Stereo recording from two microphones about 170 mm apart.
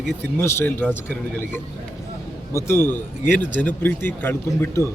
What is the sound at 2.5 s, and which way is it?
Speech, 15° left (ahead or behind).